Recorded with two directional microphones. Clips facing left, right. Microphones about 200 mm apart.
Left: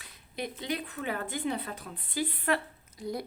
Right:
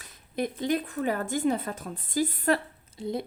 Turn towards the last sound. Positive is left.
turn(degrees=-25)  # may be behind; listen again after turning